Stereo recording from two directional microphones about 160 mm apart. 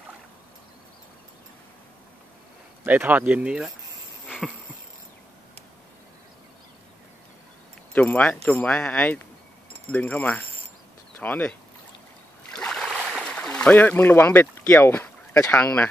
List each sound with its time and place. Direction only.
2.8 s speech: 10° right (ahead or behind)
7.9 s speech: 10° left (ahead or behind)
12.4 s a sound: 5° left (ahead or behind)